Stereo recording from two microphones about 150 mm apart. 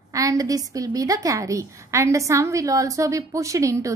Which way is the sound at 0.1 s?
20° right (ahead or behind).